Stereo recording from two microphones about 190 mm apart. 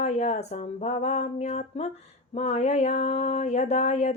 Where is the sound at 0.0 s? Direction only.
35° left (ahead or behind).